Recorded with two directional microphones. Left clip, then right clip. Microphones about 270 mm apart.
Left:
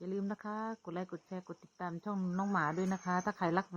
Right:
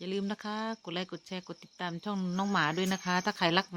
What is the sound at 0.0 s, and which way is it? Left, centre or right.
Speech, right.